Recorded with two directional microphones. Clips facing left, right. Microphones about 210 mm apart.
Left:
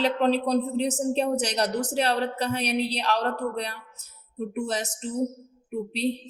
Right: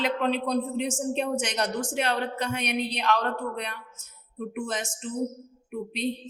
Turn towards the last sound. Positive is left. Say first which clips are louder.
# left 3 dB
turn(degrees=35)  # may be behind; listen again after turning